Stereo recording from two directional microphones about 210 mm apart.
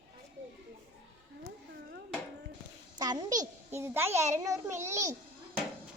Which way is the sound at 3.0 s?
20° right (ahead or behind).